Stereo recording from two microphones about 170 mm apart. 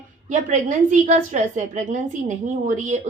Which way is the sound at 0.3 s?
45° right (ahead or behind).